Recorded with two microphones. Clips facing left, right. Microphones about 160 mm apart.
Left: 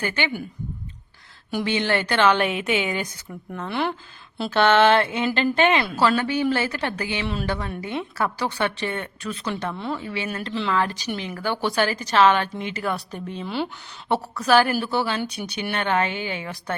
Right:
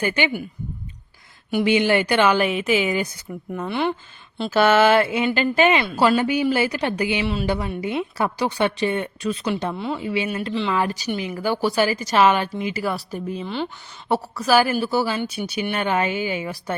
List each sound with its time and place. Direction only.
0.0 s speech: 15° right (ahead or behind)
1.6 s speech: 10° right (ahead or behind)
6.0 s speech: 15° right (ahead or behind)
9.7 s speech: 5° right (ahead or behind)